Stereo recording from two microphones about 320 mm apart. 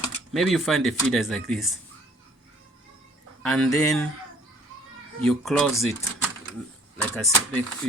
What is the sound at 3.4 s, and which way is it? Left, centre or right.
Speech, centre.